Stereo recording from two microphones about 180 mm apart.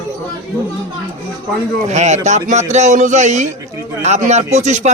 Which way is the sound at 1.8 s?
40° right (ahead or behind).